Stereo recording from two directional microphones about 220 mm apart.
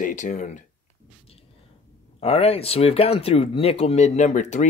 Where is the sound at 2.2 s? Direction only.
25° left (ahead or behind).